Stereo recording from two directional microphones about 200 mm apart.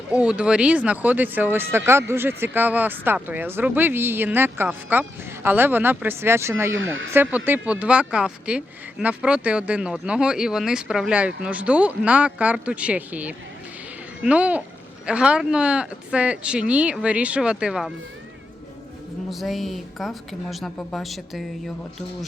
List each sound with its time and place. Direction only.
0.1 s speech: 5° right (ahead or behind)
6.7 s speech: 75° right (ahead or behind)
7.1 s speech: 10° right (ahead or behind)
19.3 s speech: centre (ahead or behind)